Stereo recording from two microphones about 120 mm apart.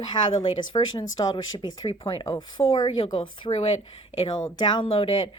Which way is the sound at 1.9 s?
50° left (ahead or behind).